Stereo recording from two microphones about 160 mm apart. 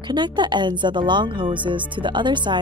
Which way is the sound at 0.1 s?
30° right (ahead or behind).